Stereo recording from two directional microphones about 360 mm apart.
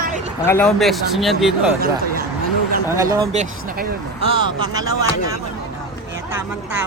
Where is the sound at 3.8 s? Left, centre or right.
Centre.